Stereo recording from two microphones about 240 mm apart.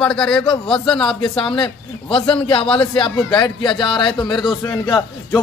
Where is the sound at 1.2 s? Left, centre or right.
Left.